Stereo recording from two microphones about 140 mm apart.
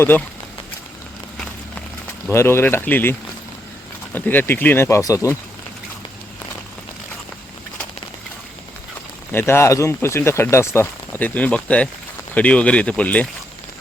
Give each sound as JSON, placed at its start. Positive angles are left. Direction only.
{"t": 2.3, "sound": "speech", "side_deg": 15}
{"t": 9.3, "sound": "speech", "side_deg": 15}